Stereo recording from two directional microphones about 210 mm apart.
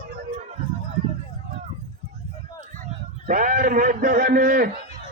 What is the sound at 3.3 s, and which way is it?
A man's voice, 40° right (ahead or behind).